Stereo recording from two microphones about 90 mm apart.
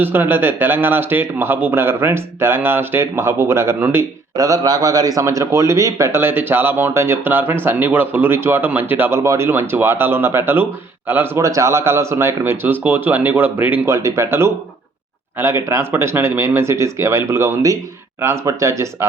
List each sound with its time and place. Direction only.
0.0 s speech: 20° right (ahead or behind)
4.4 s a man's voice: 45° right (ahead or behind); by 13.8 s 20° right (ahead or behind)
13.8 s a man's voice: 30° right (ahead or behind)